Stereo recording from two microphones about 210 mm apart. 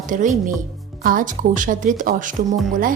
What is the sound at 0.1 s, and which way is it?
A woman's voice, 35° right (ahead or behind).